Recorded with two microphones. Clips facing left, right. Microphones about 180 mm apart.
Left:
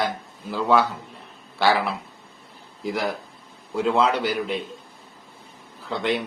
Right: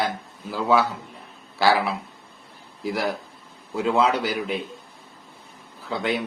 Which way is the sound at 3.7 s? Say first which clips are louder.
Even; 5° right (ahead or behind).